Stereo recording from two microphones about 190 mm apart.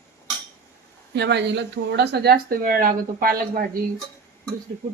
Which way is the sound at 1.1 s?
60° right (ahead or behind).